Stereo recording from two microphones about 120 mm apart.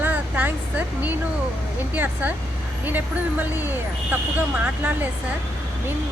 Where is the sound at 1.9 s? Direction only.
15° right (ahead or behind).